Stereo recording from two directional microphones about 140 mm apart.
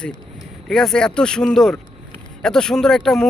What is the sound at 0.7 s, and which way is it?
Speech, 5° left (ahead or behind).